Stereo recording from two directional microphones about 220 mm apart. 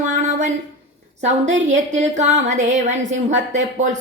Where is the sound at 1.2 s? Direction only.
30° right (ahead or behind).